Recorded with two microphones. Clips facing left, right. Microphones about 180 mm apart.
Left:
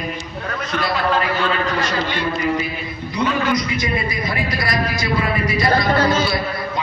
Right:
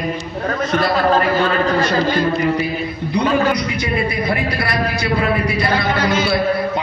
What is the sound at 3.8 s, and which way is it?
A man's voice, 60° right (ahead or behind).